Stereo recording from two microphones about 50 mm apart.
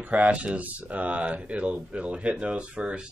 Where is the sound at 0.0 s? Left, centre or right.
Right.